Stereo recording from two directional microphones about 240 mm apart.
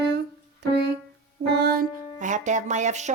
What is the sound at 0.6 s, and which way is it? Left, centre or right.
Speech, right.